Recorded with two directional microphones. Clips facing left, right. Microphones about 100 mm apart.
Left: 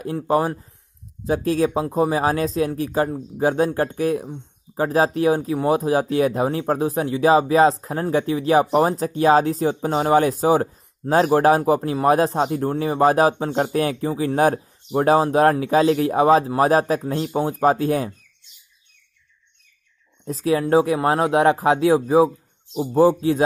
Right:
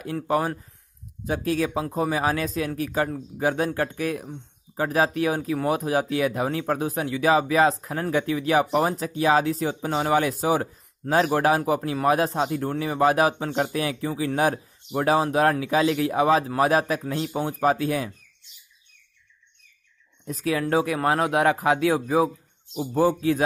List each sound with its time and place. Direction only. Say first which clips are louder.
0.0 s speech: left 4 dB; 30° left (ahead or behind)
20.2 s speech: left 5 dB; 30° left (ahead or behind)